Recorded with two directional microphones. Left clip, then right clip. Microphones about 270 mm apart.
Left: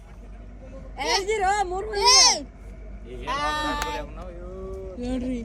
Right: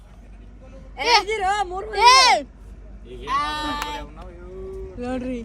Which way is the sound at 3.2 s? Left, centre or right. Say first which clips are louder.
Right 2 dB; centre.